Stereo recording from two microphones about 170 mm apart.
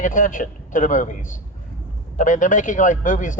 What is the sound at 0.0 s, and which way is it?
Speech, 50° left (ahead or behind).